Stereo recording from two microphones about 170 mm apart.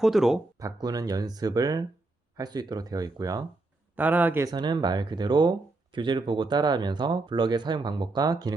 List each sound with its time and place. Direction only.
0.0 s speech: centre (ahead or behind)
0.6 s speech: 20° right (ahead or behind)
3.9 s speech: 10° right (ahead or behind)
4.5 s speech: 25° right (ahead or behind)